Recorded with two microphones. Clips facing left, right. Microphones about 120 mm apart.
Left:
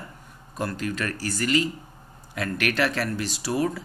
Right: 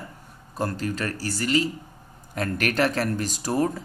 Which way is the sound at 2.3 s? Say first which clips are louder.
Right 1 dB; 40° right (ahead or behind).